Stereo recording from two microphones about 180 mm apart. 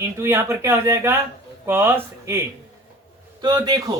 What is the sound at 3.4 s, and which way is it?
Speech, 25° right (ahead or behind).